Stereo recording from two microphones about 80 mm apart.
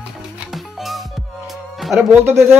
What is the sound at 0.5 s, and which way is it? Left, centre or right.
Music, centre.